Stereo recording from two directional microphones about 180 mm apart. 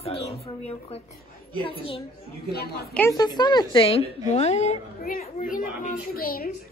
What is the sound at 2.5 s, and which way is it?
Speech, 60° left (ahead or behind).